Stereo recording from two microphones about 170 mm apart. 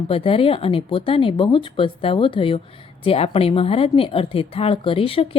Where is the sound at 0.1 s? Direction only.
35° left (ahead or behind).